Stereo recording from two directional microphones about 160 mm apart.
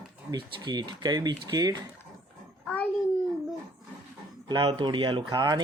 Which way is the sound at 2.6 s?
10° left (ahead or behind).